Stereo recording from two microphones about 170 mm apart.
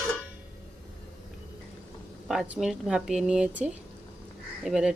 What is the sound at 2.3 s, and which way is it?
Speech, centre (ahead or behind).